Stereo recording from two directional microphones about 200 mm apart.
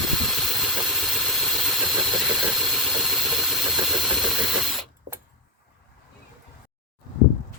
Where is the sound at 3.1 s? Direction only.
Centre (ahead or behind).